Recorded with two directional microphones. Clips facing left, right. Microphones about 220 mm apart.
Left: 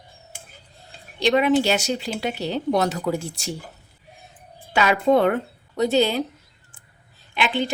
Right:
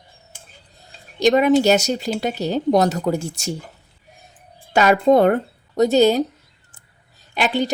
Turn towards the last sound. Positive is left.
turn(degrees=-40)  # may be behind; listen again after turning